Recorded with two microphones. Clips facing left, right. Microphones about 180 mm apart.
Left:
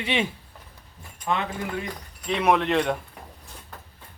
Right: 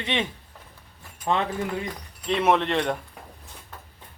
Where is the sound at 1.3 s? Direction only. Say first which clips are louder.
Right 2 dB; 30° right (ahead or behind).